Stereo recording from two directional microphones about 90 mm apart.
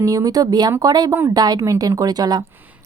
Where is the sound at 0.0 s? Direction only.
40° right (ahead or behind).